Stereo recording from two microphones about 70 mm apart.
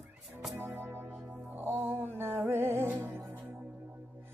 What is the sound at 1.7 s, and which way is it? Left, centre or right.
Music, right.